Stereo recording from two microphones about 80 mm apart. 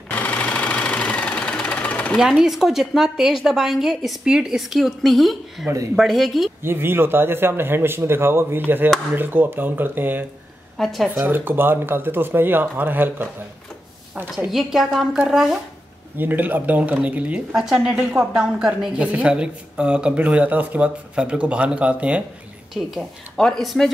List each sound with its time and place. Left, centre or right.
0.1 s sewing machine: centre
2.1 s a woman's voice: centre
6.6 s a man's voice: right
10.8 s a woman's voice: centre
11.1 s a man's voice: right
14.5 s a woman's voice: centre
16.2 s a man's voice: right
17.6 s speech: centre
22.8 s a woman's voice: centre